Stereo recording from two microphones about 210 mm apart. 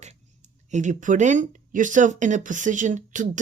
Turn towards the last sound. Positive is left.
turn(degrees=-35)  # may be behind; listen again after turning